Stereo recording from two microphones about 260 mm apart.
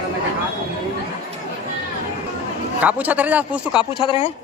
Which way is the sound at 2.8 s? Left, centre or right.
Centre.